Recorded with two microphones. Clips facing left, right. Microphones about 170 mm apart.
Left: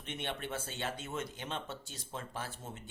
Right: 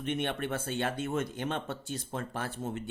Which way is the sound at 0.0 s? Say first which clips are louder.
Right 8 dB; 55° right (ahead or behind).